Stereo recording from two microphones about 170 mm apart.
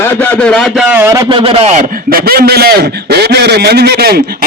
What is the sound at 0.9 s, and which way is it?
Speech, 15° right (ahead or behind).